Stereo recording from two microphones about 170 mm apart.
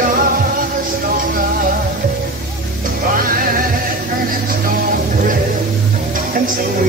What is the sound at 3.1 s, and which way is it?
Music, 55° right (ahead or behind).